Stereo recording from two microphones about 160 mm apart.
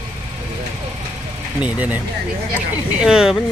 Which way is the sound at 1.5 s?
10° right (ahead or behind).